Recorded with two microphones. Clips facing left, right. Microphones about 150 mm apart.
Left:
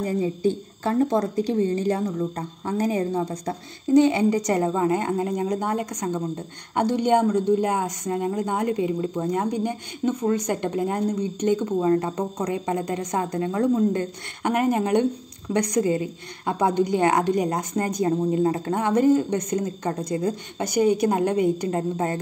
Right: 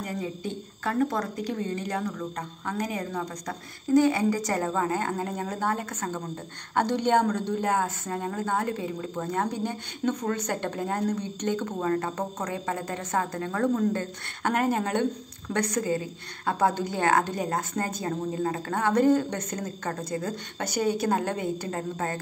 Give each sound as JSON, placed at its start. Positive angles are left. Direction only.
{"t": 0.0, "sound": "a woman's voice", "side_deg": 30}